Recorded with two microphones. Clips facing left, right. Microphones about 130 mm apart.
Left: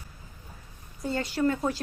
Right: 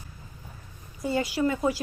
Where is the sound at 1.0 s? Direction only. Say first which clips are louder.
Right 1 dB; 5° right (ahead or behind).